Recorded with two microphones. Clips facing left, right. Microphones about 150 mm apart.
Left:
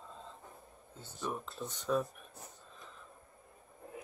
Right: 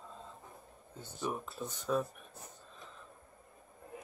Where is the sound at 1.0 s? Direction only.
10° right (ahead or behind).